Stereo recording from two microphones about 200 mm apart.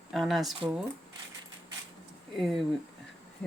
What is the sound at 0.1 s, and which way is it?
Speech, centre (ahead or behind).